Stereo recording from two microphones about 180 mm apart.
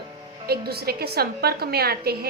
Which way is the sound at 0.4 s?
60° right (ahead or behind).